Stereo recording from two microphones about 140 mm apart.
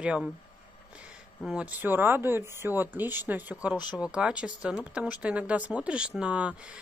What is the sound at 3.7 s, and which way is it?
Speech, 30° left (ahead or behind).